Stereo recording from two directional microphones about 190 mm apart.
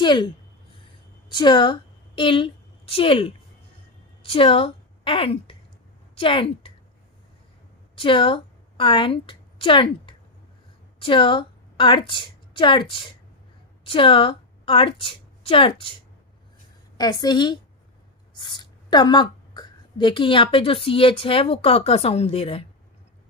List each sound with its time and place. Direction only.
0.0 s speech: 25° left (ahead or behind)
1.3 s a woman's voice: 25° left (ahead or behind)
7.9 s a woman's voice: 25° left (ahead or behind)